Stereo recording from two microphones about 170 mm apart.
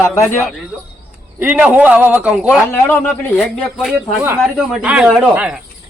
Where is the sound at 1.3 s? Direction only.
10° right (ahead or behind).